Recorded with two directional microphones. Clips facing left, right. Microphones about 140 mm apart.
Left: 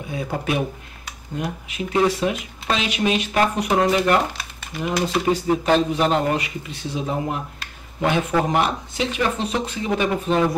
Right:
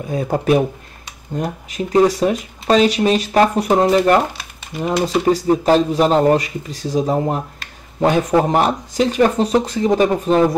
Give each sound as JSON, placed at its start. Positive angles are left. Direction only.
{"t": 0.1, "sound": "speech", "side_deg": -40}